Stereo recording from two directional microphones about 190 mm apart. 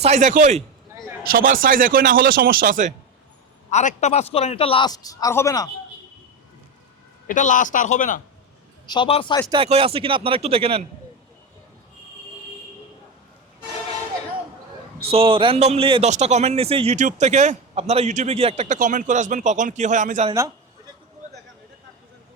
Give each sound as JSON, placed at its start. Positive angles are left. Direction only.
{"t": 0.0, "sound": "a man's voice", "side_deg": -40}
{"t": 1.3, "sound": "speech", "side_deg": -50}
{"t": 3.7, "sound": "a man's voice", "side_deg": 35}
{"t": 7.3, "sound": "speech", "side_deg": 40}
{"t": 8.9, "sound": "a man's voice", "side_deg": 25}
{"t": 9.5, "sound": "speech", "side_deg": -30}
{"t": 15.0, "sound": "a man's voice", "side_deg": -30}